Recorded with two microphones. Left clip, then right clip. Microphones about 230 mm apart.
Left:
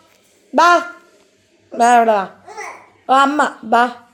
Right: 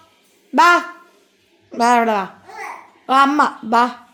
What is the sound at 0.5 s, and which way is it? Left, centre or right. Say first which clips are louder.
A woman's voice: left 1 dB; right.